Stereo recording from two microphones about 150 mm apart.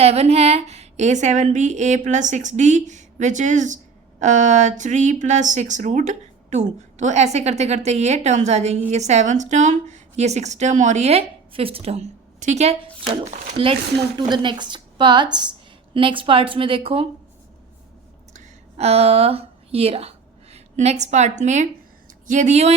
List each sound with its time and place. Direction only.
0.0 s speech: 45° right (ahead or behind)
14.2 s a woman's voice: 30° right (ahead or behind)
18.3 s a woman's voice: 45° right (ahead or behind)